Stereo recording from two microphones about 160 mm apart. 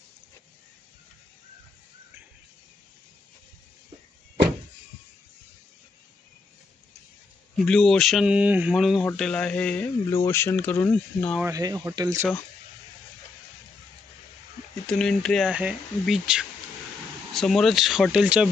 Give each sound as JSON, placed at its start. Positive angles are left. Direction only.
{"t": 7.5, "sound": "speech", "side_deg": 0}
{"t": 11.4, "sound": "speech", "side_deg": -20}
{"t": 14.8, "sound": "speech", "side_deg": 5}